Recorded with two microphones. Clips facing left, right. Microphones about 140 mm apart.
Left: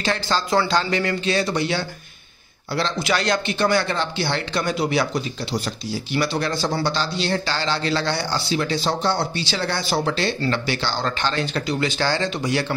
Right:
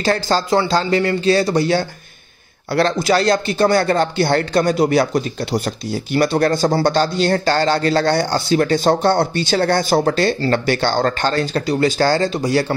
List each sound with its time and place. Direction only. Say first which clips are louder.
0.0 s speech: right 6 dB; 40° right (ahead or behind)
0.5 s speech: right 3 dB; 30° right (ahead or behind)
3.0 s a man's voice: right 6 dB; 35° right (ahead or behind)